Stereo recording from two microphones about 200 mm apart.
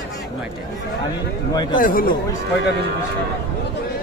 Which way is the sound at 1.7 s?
45° left (ahead or behind).